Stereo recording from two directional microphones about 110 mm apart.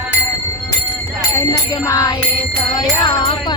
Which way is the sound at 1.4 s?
30° left (ahead or behind).